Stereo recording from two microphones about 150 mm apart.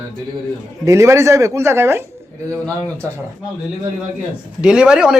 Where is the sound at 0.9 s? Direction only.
20° right (ahead or behind).